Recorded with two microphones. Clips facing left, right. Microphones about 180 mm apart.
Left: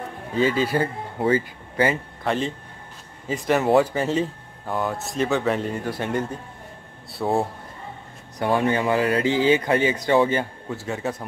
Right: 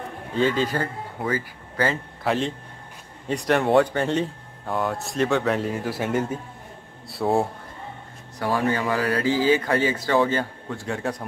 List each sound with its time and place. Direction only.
0.4 s a man's voice: 5° left (ahead or behind)
1.2 s speech: 25° left (ahead or behind)
2.2 s speech: centre (ahead or behind)
8.4 s speech: 20° left (ahead or behind)
10.8 s speech: centre (ahead or behind)